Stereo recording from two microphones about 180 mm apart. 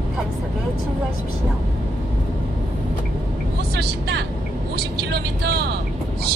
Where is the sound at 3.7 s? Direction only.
60° right (ahead or behind).